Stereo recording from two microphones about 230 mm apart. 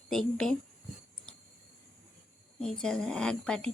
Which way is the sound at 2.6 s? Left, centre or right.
Centre.